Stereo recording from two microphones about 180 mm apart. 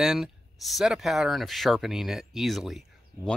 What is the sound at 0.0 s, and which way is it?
Speech, centre (ahead or behind).